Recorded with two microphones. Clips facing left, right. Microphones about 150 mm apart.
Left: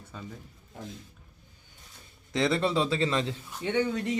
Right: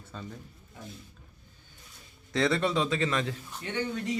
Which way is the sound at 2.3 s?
20° left (ahead or behind).